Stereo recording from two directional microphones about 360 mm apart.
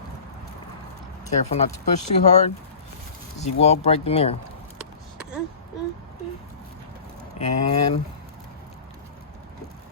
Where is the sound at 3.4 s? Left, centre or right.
Centre.